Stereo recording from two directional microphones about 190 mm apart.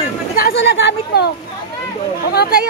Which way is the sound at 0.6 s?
70° left (ahead or behind).